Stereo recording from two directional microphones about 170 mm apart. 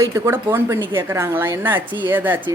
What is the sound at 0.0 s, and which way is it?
Speech, 15° right (ahead or behind).